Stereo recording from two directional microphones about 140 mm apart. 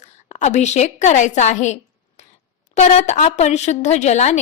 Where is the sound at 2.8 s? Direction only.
50° left (ahead or behind).